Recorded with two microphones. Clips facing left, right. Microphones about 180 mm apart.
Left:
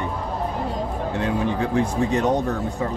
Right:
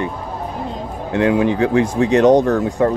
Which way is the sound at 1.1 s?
90° right.